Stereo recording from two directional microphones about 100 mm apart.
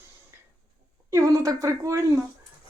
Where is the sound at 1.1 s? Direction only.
30° right (ahead or behind).